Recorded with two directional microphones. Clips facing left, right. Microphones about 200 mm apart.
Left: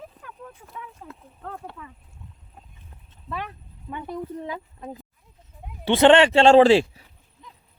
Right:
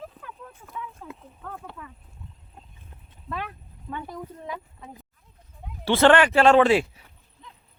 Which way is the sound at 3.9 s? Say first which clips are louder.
Left 4 dB; 20° left (ahead or behind).